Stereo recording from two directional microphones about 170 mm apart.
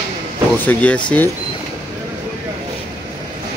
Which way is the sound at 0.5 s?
10° left (ahead or behind).